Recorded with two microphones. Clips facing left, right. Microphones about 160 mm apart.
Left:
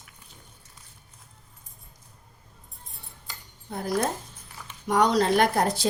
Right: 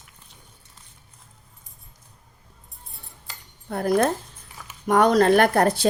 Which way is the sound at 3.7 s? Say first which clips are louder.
Right 6 dB; 60° right (ahead or behind).